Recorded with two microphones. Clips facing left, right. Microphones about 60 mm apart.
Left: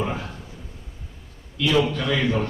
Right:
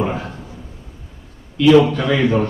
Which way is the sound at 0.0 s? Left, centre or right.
Right.